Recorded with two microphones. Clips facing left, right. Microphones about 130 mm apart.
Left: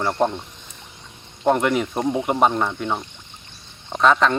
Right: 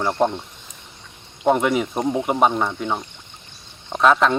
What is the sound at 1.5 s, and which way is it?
Speech, 5° right (ahead or behind).